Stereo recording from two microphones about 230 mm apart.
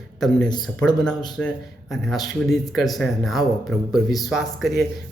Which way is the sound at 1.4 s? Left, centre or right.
Centre.